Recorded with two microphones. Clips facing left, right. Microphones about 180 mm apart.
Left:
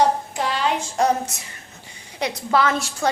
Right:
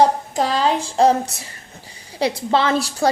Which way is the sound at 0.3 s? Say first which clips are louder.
Right 4 dB; 35° right (ahead or behind).